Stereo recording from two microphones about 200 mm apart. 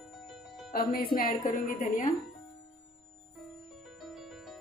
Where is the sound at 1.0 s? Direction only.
45° left (ahead or behind).